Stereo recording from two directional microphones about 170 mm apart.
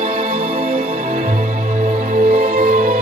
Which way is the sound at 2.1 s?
55° right (ahead or behind).